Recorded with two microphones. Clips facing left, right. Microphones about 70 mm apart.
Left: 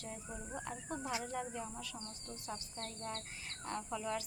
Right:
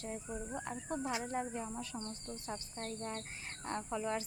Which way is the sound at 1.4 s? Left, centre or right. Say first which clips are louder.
Right 3 dB; right.